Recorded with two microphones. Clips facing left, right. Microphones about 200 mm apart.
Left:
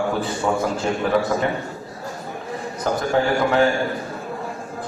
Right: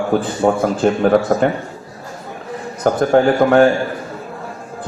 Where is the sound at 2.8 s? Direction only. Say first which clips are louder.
Right 7 dB; 50° right (ahead or behind).